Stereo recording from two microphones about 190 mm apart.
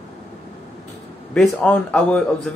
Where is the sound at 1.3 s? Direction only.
5° left (ahead or behind).